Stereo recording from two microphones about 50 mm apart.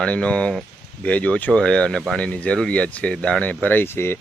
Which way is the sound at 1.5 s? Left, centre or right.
Centre.